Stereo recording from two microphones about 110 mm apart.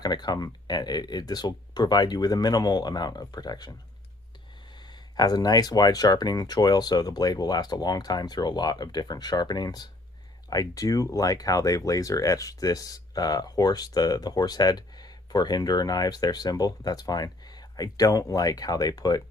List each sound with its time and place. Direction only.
0.0 s speech: 40° left (ahead or behind)